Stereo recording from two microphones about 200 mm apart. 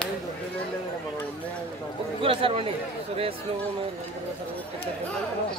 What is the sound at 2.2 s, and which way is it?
Speech, 25° right (ahead or behind).